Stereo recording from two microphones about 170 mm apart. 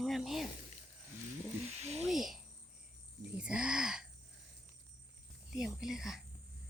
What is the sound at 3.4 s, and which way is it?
Speech, 5° right (ahead or behind).